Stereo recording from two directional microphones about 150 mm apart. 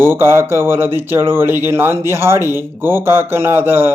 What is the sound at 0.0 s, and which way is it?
A man's voice, 15° right (ahead or behind).